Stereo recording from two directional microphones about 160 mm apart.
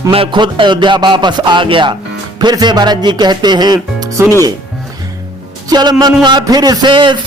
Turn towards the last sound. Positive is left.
turn(degrees=-30)  # may be behind; listen again after turning